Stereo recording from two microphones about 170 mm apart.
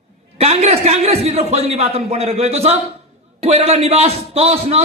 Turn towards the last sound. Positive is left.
turn(degrees=-35)  # may be behind; listen again after turning